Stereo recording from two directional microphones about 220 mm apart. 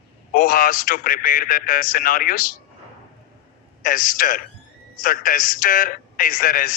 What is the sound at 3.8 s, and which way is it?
Speech, 40° left (ahead or behind).